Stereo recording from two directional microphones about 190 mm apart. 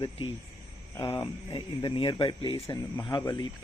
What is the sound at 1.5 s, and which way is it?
A man's voice, 25° left (ahead or behind).